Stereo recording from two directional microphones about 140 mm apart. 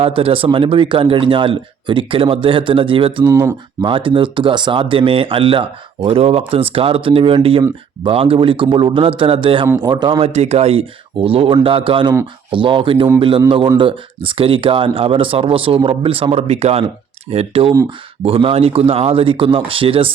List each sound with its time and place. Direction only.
0.0 s speech: 40° right (ahead or behind)
3.2 s speech: 15° right (ahead or behind)
3.8 s a man's voice: 40° right (ahead or behind)
10.2 s speech: 45° right (ahead or behind)